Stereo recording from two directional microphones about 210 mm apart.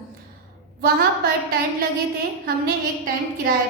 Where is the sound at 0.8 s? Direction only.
45° right (ahead or behind).